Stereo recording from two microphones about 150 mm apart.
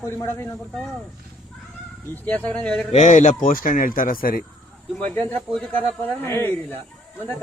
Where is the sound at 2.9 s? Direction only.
55° left (ahead or behind); by 4.5 s 75° left (ahead or behind).